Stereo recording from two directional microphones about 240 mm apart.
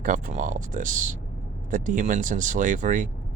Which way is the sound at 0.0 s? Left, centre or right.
Right.